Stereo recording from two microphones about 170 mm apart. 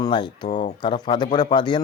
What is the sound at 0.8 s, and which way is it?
Speech, 25° left (ahead or behind).